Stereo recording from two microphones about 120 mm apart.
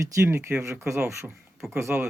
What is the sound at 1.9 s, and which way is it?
Speech, 15° right (ahead or behind).